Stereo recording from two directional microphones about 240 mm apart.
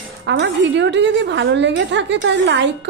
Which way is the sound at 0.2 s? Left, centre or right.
Right.